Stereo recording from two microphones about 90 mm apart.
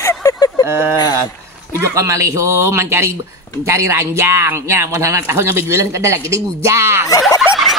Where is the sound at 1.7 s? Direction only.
35° right (ahead or behind).